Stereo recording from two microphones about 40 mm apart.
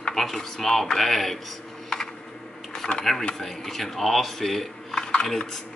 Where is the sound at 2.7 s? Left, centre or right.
Left.